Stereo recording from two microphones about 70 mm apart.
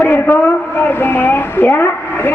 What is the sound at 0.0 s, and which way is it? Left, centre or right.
A man's voice, left.